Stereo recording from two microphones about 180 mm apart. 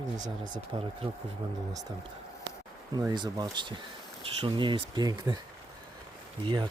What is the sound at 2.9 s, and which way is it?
Speech, 20° right (ahead or behind).